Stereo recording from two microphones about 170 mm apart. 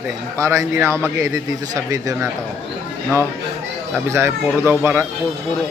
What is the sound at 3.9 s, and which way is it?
Speech, 15° right (ahead or behind).